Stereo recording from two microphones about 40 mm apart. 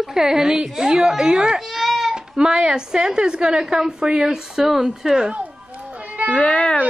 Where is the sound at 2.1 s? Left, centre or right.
Centre.